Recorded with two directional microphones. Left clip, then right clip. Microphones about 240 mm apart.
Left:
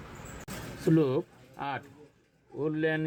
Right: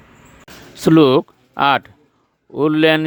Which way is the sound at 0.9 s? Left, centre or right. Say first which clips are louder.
Right 15 dB; right.